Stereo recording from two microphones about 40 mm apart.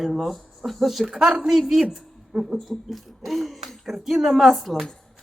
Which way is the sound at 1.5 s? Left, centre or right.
Centre.